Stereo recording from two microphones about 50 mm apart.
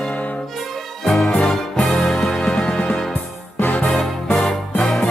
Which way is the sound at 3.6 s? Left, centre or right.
Left.